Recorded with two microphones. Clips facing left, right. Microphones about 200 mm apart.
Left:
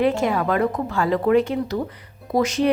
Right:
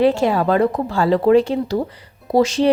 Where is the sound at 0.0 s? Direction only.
30° right (ahead or behind).